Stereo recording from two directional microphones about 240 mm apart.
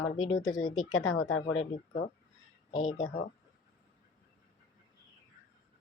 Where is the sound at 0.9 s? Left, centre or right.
Left.